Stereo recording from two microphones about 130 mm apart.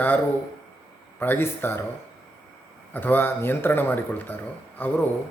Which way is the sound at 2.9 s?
15° left (ahead or behind).